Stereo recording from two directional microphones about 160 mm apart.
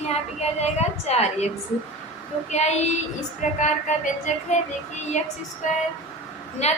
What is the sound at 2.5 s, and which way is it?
Speech, 45° left (ahead or behind).